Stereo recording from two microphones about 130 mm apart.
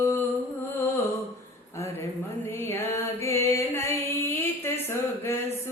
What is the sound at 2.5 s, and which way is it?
Music, 20° left (ahead or behind).